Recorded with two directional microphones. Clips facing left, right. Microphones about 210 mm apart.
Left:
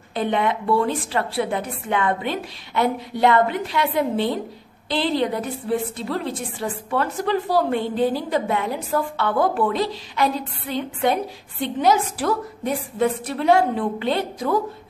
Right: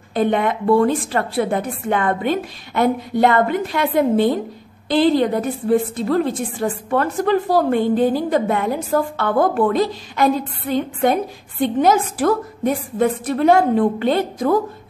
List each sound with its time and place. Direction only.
0.1 s a woman's voice: 50° right (ahead or behind)